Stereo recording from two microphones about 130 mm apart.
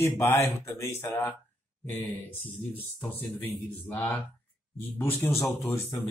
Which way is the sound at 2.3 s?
15° left (ahead or behind).